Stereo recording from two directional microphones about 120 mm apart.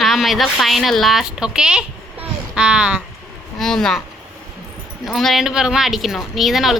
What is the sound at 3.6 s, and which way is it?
Speech, 5° left (ahead or behind).